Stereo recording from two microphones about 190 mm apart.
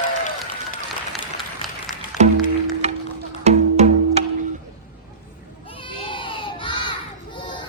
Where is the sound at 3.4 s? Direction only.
35° right (ahead or behind).